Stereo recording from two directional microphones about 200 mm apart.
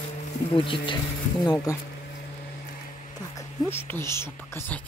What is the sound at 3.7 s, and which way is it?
Speech, 10° left (ahead or behind).